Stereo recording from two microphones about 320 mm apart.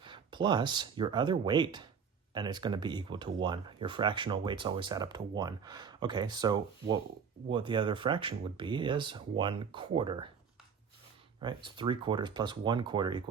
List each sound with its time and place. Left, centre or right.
0.0 s speech: centre
11.3 s speech: centre